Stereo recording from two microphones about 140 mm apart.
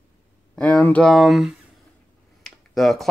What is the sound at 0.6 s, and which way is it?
Speech, 10° left (ahead or behind).